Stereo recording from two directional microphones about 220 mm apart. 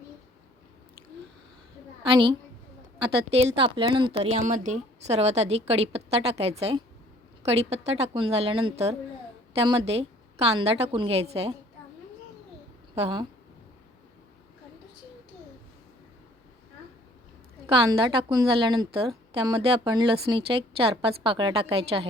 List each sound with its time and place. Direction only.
2.0 s a woman's voice: 25° right (ahead or behind)
3.3 s a woman's voice: 25° right (ahead or behind)
4.4 s a woman's voice: 35° right (ahead or behind)
13.0 s a woman's voice: 20° right (ahead or behind)
17.7 s a woman's voice: 20° right (ahead or behind)